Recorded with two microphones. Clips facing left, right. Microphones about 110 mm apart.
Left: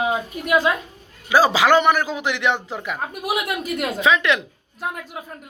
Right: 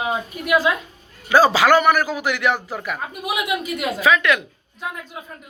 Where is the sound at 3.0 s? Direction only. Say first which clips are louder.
Left 4 dB; centre (ahead or behind).